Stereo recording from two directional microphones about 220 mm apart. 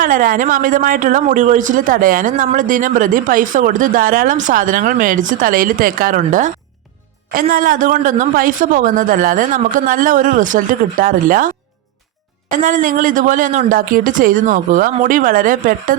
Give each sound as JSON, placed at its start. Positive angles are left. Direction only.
{"t": 0.0, "sound": "speech", "side_deg": -40}